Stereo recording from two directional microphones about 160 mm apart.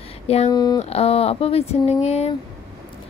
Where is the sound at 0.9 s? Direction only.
40° left (ahead or behind).